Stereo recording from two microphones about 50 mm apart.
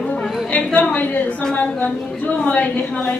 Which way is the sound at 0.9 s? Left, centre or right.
Left.